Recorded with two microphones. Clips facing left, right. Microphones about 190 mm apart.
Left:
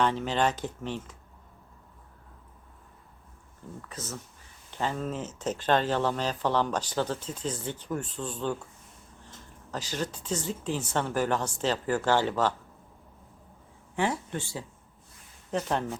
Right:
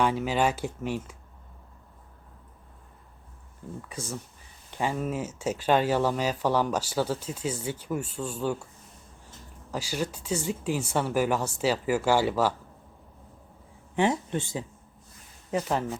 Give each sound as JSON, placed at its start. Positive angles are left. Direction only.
{"t": 0.0, "sound": "speech", "side_deg": -10}
{"t": 3.8, "sound": "speech", "side_deg": -10}
{"t": 9.7, "sound": "speech", "side_deg": -10}
{"t": 13.9, "sound": "speech", "side_deg": -20}
{"t": 15.5, "sound": "speech", "side_deg": -5}